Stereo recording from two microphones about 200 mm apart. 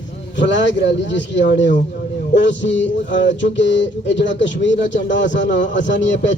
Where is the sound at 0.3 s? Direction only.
65° left (ahead or behind).